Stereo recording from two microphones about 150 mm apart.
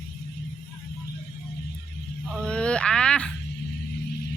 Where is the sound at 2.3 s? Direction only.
5° left (ahead or behind).